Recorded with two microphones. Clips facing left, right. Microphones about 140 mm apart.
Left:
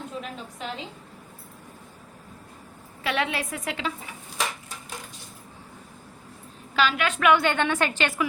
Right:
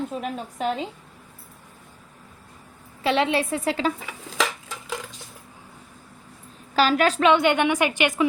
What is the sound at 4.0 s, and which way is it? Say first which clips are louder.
Dishes: right 5 dB; 90° right.